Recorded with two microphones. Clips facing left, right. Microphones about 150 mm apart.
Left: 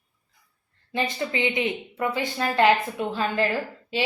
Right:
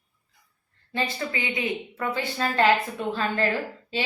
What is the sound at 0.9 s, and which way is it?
A woman's voice, 20° left (ahead or behind).